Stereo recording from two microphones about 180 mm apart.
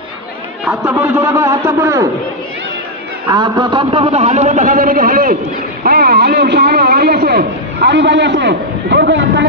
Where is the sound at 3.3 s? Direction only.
20° right (ahead or behind).